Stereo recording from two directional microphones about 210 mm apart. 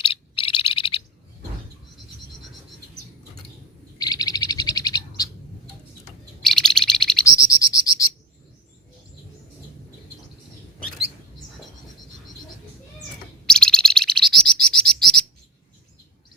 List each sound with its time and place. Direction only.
0.0 s frog: 25° left (ahead or behind)
3.9 s bird: 15° left (ahead or behind)
6.4 s bird: 5° left (ahead or behind)
7.3 s frog: 15° left (ahead or behind)
13.5 s bird: 5° left (ahead or behind)